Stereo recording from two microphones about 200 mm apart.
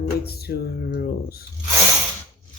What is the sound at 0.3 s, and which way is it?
Speech, 50° left (ahead or behind).